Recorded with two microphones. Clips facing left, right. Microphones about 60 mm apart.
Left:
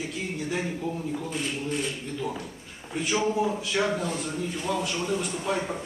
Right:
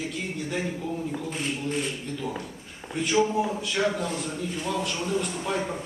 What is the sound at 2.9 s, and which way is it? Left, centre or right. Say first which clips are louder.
A man's voice: right 2 dB; centre.